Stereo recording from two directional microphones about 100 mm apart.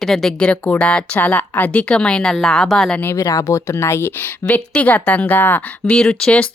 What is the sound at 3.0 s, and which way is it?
Speech, 25° left (ahead or behind).